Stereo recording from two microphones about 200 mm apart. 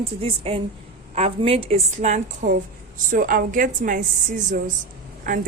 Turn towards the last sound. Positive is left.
turn(degrees=-40)  # may be behind; listen again after turning